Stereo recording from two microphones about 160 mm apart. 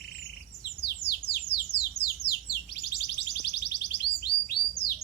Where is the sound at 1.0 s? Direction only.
85° left.